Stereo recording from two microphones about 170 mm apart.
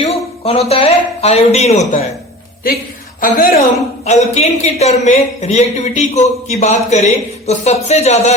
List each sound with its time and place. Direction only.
0.0 s a sound: 35° left (ahead or behind)
0.7 s speech: 35° left (ahead or behind)
3.2 s a woman's voice: 55° left (ahead or behind)
4.0 s speech: 40° left (ahead or behind)